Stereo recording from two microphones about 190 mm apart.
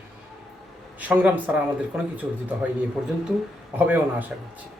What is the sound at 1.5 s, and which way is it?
Speech, 5° right (ahead or behind).